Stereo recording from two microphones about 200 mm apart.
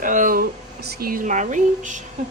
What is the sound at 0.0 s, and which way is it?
Speech, 40° right (ahead or behind).